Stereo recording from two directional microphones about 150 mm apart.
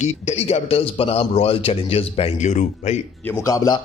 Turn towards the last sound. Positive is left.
turn(degrees=25)  # may be behind; listen again after turning